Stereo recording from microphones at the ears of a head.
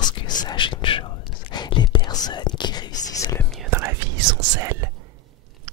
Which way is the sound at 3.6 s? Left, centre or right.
Right.